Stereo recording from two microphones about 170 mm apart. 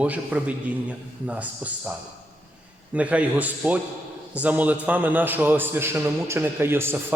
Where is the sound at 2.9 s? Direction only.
10° right (ahead or behind).